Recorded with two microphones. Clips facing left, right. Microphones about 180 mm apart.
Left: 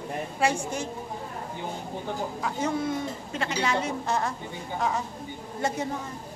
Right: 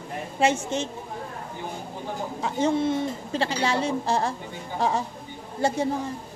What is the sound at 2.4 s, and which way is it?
A woman's voice, 25° right (ahead or behind).